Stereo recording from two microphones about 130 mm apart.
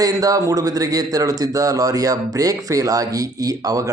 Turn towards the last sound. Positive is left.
turn(degrees=-25)  # may be behind; listen again after turning